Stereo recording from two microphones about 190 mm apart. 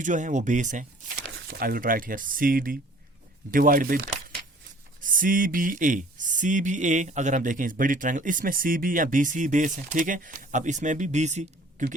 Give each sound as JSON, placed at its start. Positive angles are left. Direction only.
{"t": 0.0, "sound": "speech", "side_deg": -40}
{"t": 1.2, "sound": "speech", "side_deg": -65}